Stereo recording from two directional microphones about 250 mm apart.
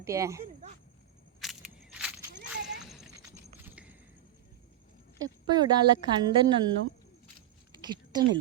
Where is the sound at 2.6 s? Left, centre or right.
Right.